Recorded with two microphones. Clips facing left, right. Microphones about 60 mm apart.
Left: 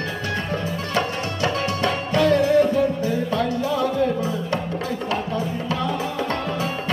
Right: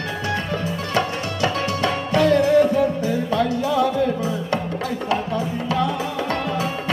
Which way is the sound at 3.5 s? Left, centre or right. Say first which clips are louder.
Right 1 dB; left.